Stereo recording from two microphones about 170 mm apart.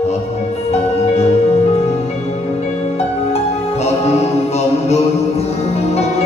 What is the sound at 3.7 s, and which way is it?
Music, 40° left (ahead or behind).